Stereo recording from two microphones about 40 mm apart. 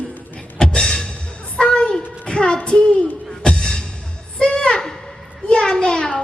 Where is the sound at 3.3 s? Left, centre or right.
Centre.